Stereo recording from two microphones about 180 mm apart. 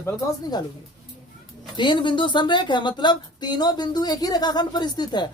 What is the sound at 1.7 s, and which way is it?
A woman's voice, 25° left (ahead or behind).